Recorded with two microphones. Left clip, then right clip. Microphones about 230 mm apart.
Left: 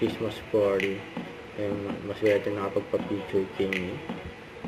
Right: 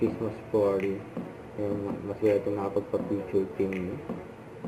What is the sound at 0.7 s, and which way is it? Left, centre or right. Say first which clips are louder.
Speech: left 1 dB; centre.